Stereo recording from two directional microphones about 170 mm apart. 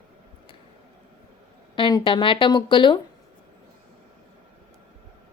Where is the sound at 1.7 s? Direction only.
30° left (ahead or behind).